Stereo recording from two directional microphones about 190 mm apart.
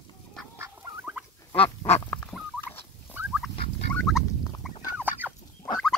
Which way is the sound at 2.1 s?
10° left (ahead or behind).